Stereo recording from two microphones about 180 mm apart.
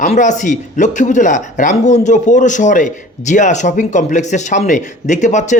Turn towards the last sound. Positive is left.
turn(degrees=40)  # may be behind; listen again after turning